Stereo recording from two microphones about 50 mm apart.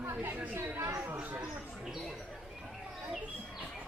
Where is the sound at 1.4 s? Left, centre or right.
Centre.